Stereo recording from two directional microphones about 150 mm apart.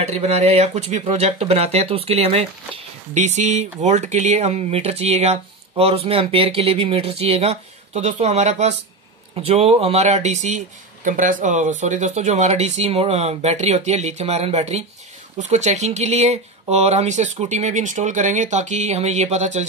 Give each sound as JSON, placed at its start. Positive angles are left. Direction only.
{"t": 0.0, "sound": "speech", "side_deg": -45}